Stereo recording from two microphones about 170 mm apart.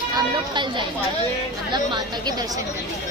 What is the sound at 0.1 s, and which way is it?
Speech, 25° right (ahead or behind).